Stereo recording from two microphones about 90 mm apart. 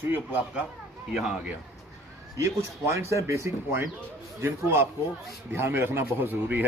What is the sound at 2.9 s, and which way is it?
A man's voice, 35° right (ahead or behind).